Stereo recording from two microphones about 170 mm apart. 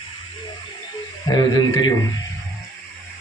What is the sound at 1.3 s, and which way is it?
Speech, 25° left (ahead or behind).